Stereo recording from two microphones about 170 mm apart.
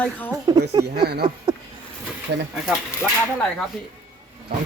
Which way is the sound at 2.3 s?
90° right.